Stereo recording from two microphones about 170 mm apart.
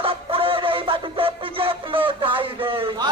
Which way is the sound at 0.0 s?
30° right (ahead or behind).